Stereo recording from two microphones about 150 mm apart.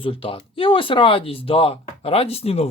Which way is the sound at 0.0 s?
35° left (ahead or behind).